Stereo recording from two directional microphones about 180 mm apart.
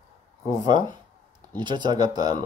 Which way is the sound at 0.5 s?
20° right (ahead or behind).